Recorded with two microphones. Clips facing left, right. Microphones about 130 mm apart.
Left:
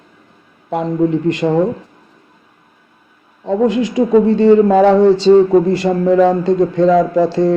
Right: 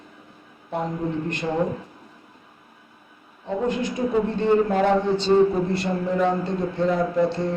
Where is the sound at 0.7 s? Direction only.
90° left.